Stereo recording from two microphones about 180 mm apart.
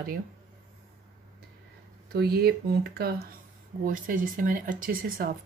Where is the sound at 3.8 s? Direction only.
50° right (ahead or behind).